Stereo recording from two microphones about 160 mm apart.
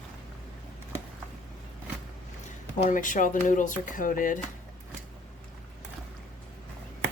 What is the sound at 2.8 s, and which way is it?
Speech, 55° left (ahead or behind).